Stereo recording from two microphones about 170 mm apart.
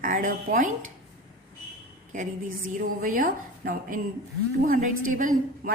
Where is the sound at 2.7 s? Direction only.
55° right (ahead or behind).